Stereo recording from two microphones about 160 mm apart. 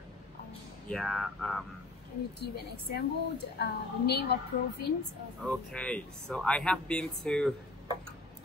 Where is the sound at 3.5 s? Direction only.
90° left.